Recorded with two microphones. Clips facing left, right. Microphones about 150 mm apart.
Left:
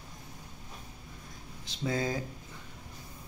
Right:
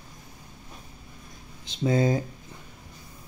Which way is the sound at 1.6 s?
20° right (ahead or behind).